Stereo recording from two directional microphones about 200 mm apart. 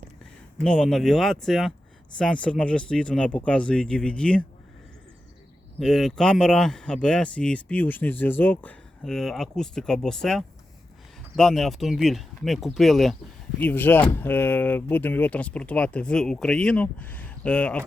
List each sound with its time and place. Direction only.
0.6 s speech: 5° left (ahead or behind)
5.8 s speech: centre (ahead or behind)